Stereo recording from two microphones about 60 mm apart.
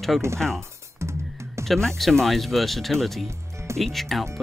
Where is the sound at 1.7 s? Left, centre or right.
Centre.